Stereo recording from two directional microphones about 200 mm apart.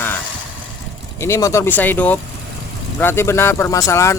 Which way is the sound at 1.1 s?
15° left (ahead or behind).